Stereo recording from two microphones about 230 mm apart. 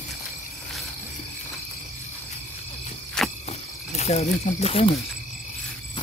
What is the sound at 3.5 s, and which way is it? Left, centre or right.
Snake, left.